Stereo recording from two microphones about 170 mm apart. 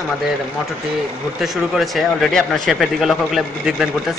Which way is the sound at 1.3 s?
Centre (ahead or behind).